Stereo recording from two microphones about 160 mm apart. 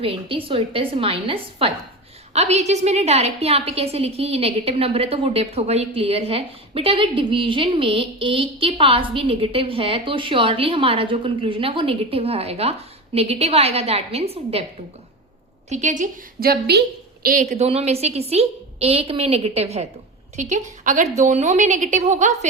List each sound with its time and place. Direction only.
0.0 s a woman's voice: 35° right (ahead or behind)
15.7 s a woman's voice: 50° right (ahead or behind)
16.5 s a woman's voice: 90° right
17.2 s a woman's voice: 55° right (ahead or behind)